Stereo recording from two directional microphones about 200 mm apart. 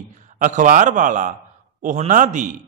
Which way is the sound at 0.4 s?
40° right (ahead or behind).